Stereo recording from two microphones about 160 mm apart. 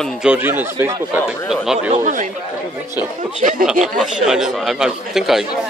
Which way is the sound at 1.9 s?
50° right (ahead or behind).